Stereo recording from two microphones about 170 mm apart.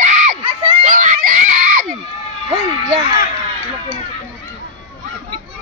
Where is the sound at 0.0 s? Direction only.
40° right (ahead or behind).